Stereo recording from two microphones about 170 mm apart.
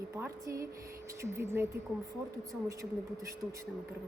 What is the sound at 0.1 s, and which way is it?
Speech, 15° right (ahead or behind).